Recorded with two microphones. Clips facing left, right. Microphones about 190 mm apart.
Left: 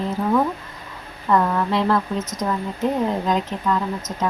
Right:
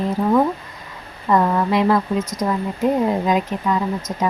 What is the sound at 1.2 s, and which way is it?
Speech, 15° right (ahead or behind).